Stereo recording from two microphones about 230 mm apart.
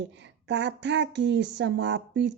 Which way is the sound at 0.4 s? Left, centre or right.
Right.